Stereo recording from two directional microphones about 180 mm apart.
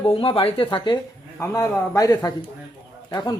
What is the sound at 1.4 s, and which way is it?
Speech, 15° left (ahead or behind).